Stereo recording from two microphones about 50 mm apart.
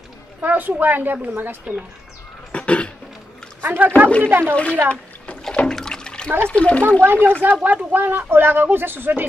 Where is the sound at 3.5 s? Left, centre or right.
Right.